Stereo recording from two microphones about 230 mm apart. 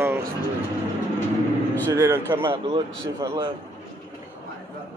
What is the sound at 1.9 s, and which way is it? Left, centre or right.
Speech, centre.